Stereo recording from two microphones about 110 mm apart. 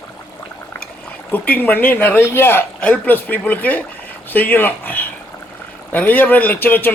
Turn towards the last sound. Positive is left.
turn(degrees=20)  # may be behind; listen again after turning